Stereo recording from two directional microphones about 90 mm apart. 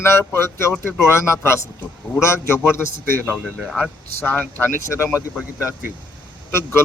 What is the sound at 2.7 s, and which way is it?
Speech, 25° left (ahead or behind).